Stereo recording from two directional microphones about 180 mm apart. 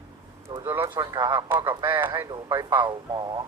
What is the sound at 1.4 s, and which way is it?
Speech, 10° right (ahead or behind).